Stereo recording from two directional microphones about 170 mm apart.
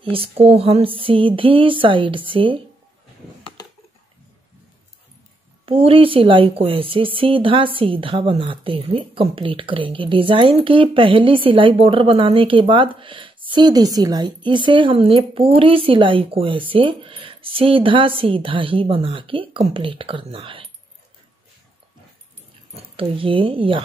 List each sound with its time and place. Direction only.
0.0 s speech: 35° right (ahead or behind)
5.7 s speech: 35° right (ahead or behind)
22.8 s speech: 30° right (ahead or behind)